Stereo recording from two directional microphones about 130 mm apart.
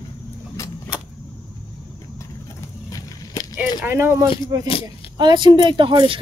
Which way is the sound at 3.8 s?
15° right (ahead or behind).